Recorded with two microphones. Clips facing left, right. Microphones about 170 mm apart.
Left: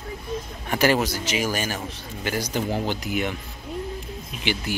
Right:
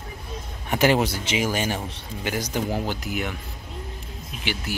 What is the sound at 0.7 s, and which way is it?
Speech, 20° right (ahead or behind).